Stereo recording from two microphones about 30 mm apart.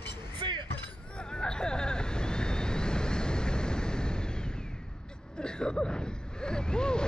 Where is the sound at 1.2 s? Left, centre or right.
Left.